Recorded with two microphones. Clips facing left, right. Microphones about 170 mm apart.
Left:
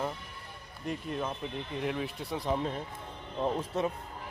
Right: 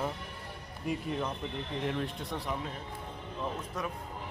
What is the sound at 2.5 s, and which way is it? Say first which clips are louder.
Speech: left 5 dB; 35° left (ahead or behind).